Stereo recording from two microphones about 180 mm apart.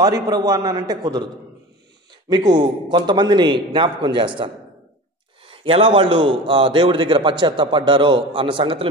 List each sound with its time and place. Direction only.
0.0 s a man's voice: 20° right (ahead or behind)
5.5 s a man's voice: 30° right (ahead or behind)